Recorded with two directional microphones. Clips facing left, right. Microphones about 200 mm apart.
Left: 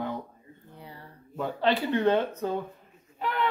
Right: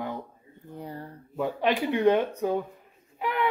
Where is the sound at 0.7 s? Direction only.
45° right (ahead or behind).